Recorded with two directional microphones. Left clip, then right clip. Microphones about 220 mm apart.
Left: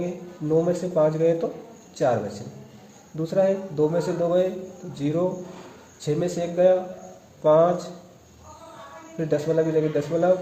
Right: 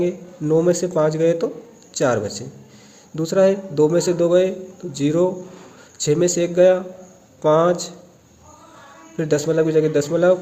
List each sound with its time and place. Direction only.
0.4 s a man's voice: 45° right (ahead or behind)
3.2 s a man's voice: 45° right (ahead or behind)
9.1 s a man's voice: 45° right (ahead or behind)